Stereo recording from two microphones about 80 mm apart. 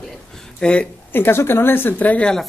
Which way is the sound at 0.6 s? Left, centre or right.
Centre.